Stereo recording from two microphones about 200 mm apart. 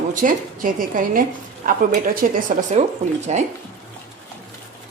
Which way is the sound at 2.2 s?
45° right (ahead or behind).